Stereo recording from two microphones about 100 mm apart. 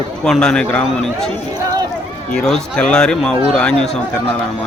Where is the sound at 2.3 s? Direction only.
5° left (ahead or behind).